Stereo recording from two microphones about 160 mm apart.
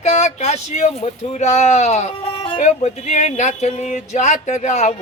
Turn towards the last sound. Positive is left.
turn(degrees=45)  # may be behind; listen again after turning